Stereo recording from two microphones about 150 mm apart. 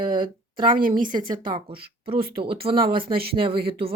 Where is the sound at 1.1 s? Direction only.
30° right (ahead or behind).